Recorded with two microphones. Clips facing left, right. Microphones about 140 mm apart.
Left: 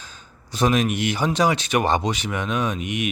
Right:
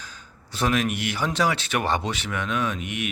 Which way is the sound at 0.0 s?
25° left (ahead or behind).